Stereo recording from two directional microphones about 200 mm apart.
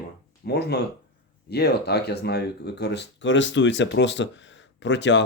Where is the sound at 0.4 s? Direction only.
55° left (ahead or behind).